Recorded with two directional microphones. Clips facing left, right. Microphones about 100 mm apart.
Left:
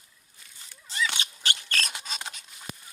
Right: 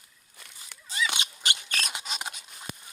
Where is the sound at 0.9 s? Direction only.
10° right (ahead or behind).